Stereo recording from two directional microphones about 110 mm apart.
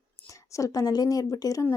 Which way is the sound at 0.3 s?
30° left (ahead or behind).